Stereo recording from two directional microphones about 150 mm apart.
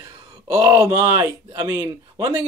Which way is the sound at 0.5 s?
25° right (ahead or behind).